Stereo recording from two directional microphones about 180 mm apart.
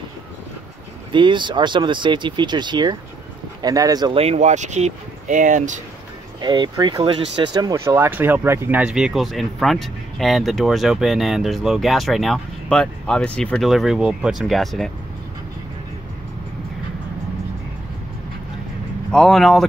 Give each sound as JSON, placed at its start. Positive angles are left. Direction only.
{"t": 1.1, "sound": "speech", "side_deg": -25}
{"t": 4.2, "sound": "speech", "side_deg": -40}
{"t": 6.4, "sound": "speech", "side_deg": -25}
{"t": 19.1, "sound": "speech", "side_deg": 0}